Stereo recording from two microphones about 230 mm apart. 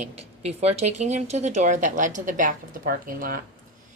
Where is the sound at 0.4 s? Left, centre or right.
Right.